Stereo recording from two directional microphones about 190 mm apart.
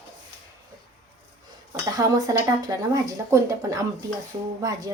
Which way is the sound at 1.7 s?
20° right (ahead or behind).